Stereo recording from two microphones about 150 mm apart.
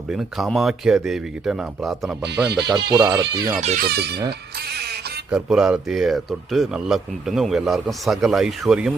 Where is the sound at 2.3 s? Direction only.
90° right.